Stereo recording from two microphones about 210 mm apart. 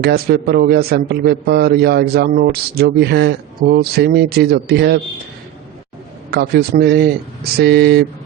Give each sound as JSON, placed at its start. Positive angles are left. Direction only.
{"t": 0.0, "sound": "a man's voice", "side_deg": -50}
{"t": 6.3, "sound": "a man's voice", "side_deg": -50}